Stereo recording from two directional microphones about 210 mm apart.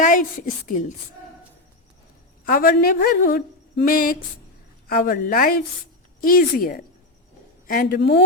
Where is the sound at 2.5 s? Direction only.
45° left (ahead or behind).